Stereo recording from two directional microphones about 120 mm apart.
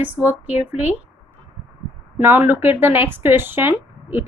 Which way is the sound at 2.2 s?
15° right (ahead or behind).